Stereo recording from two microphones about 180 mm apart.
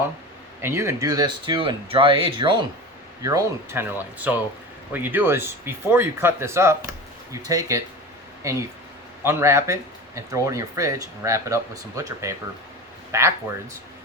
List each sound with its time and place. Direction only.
0.6 s speech: 15° right (ahead or behind)
3.2 s speech: 15° right (ahead or behind)